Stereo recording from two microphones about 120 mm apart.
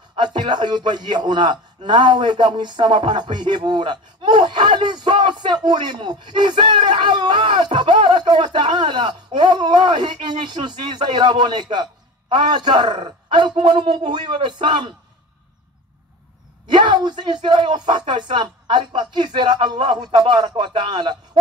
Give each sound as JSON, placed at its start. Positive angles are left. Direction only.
{"t": 0.1, "sound": "a man's voice", "side_deg": -40}
{"t": 16.6, "sound": "a man's voice", "side_deg": -40}